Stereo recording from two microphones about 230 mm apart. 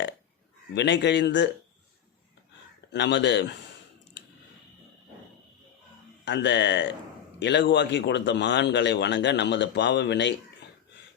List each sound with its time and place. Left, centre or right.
0.7 s speech: left
2.9 s speech: left
6.2 s speech: left